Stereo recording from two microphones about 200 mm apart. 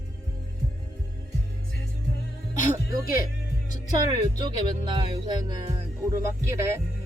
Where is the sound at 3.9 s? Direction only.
20° right (ahead or behind).